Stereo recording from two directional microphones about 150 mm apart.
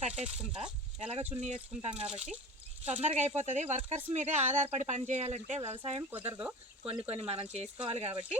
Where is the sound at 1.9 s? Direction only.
35° right (ahead or behind).